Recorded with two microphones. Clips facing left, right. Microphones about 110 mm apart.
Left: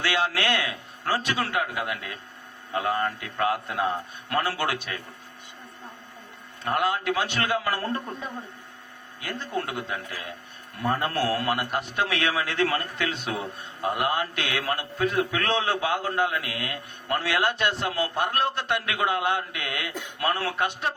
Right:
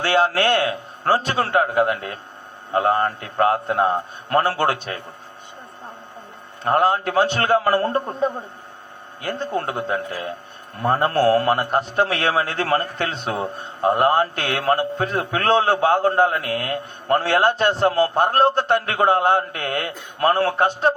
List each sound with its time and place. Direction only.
0.0 s a man's voice: 40° right (ahead or behind)
6.7 s a man's voice: 40° right (ahead or behind)